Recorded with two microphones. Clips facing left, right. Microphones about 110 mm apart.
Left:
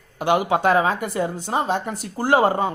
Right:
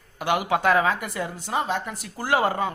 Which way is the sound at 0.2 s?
25° left (ahead or behind).